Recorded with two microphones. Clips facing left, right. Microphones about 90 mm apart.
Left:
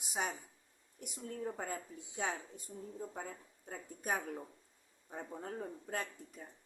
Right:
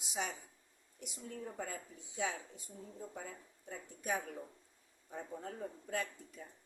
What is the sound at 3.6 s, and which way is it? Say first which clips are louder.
Speech: left 1 dB; 45° left (ahead or behind).